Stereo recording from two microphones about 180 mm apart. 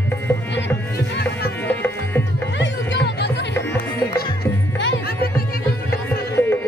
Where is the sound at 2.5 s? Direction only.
80° left.